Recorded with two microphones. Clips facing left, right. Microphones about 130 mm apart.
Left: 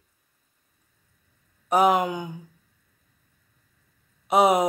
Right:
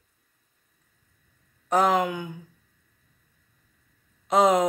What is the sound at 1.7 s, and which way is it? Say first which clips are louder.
Speech: left 2 dB; 15° left (ahead or behind).